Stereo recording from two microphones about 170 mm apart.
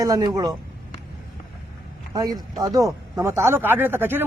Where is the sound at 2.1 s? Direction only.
25° right (ahead or behind).